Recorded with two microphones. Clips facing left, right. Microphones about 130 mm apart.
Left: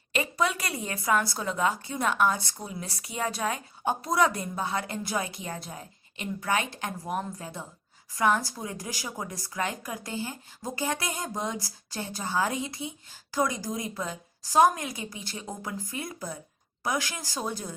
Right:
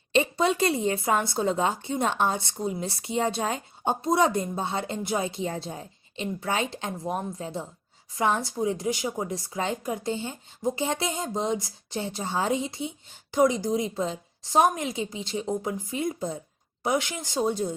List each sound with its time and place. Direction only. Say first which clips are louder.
0.1 s a woman's voice: right 5 dB; 25° right (ahead or behind)